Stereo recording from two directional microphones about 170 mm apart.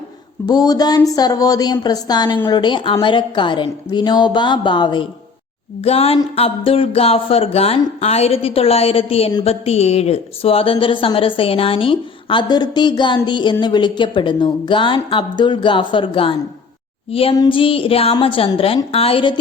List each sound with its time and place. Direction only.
0.4 s speech: 25° left (ahead or behind)
5.8 s speech: 35° left (ahead or behind)